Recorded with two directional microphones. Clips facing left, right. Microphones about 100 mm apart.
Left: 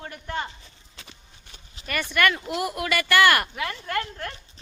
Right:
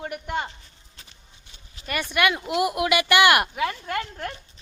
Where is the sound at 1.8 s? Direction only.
25° left (ahead or behind).